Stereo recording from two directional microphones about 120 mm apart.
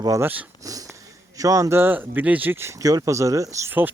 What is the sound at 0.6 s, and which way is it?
Wheeze, 30° right (ahead or behind).